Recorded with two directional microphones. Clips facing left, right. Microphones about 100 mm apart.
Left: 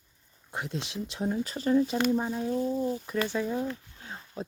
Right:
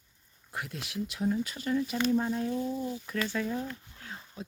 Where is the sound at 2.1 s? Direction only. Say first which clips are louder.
Left 1 dB; 15° left (ahead or behind).